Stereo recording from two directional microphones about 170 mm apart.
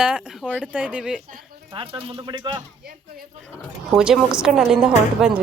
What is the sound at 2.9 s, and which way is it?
Speech, 60° right (ahead or behind).